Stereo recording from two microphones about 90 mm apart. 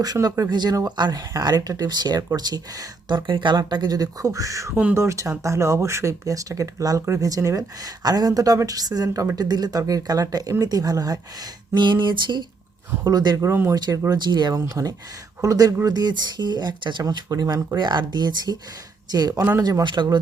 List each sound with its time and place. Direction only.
0.0 s speech: 45° right (ahead or behind)
11.7 s speech: 60° right (ahead or behind)
13.1 s speech: 45° right (ahead or behind)
14.1 s speech: 55° right (ahead or behind)
14.5 s speech: 35° right (ahead or behind); by 18.5 s 55° right (ahead or behind)
19.3 s a man's voice: 25° right (ahead or behind)
19.5 s speech: 40° right (ahead or behind)
19.8 s speech: 60° right (ahead or behind)